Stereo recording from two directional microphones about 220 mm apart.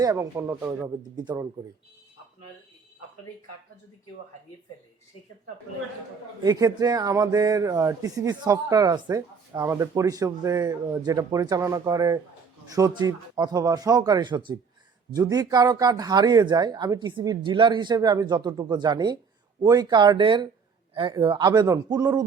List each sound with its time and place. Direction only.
0.0 s speech: 15° right (ahead or behind)
6.4 s speech: 15° right (ahead or behind)